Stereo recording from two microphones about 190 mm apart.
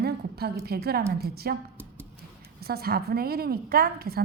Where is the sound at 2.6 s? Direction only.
55° right (ahead or behind).